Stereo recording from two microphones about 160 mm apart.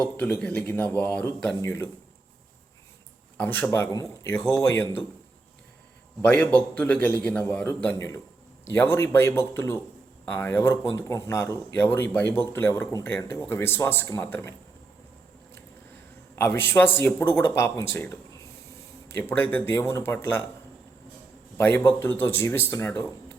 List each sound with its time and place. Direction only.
0.2 s a man's voice: 10° left (ahead or behind)
3.3 s a man's voice: 10° left (ahead or behind)
6.2 s a man's voice: 10° left (ahead or behind)
16.3 s a man's voice: 15° left (ahead or behind)
21.6 s a man's voice: 15° left (ahead or behind)